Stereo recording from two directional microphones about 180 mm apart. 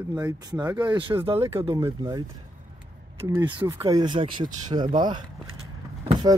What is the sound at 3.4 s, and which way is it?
Speech, 25° right (ahead or behind).